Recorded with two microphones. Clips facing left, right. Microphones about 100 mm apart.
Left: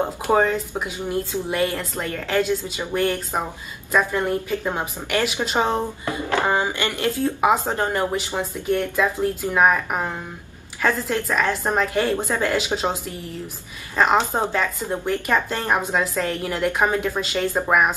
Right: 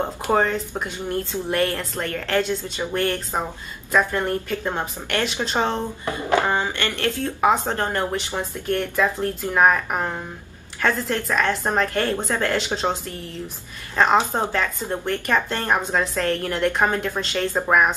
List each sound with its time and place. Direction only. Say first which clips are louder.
0.0 s speech: left 2 dB; 5° left (ahead or behind)
14.0 s speech: even; 5° left (ahead or behind)